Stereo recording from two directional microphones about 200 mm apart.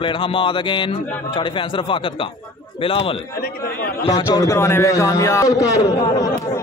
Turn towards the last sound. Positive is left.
turn(degrees=15)  # may be behind; listen again after turning